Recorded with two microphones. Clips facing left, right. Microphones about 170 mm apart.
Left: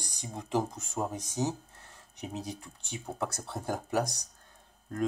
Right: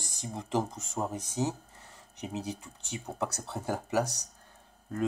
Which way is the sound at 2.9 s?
Centre (ahead or behind).